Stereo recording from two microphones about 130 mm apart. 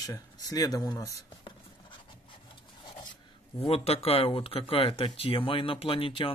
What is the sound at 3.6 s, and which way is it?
Speech, 50° left (ahead or behind).